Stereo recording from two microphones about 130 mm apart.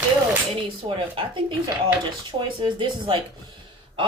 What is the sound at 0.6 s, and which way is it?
Speech, 40° right (ahead or behind).